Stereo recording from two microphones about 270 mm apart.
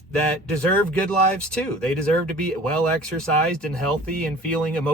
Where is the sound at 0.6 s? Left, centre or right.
Centre.